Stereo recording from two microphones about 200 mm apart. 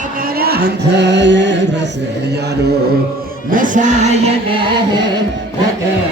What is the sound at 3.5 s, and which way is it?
Chant, 40° right (ahead or behind).